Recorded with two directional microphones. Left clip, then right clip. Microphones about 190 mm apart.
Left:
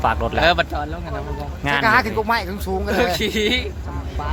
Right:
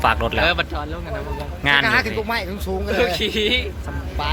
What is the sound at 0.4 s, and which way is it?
Speech, 55° left (ahead or behind).